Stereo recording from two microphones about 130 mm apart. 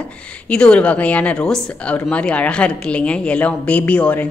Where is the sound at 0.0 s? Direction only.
10° left (ahead or behind).